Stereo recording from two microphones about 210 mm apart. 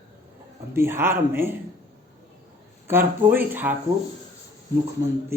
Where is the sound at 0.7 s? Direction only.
10° right (ahead or behind).